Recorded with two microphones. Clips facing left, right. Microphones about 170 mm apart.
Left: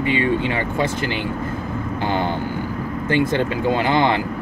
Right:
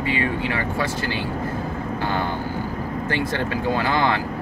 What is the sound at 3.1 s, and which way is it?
Speech, 20° left (ahead or behind).